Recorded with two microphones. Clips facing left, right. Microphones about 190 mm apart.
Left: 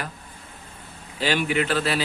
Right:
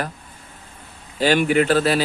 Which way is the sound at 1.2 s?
45° right (ahead or behind).